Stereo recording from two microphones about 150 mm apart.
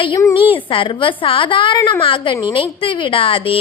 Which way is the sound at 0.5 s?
35° left (ahead or behind).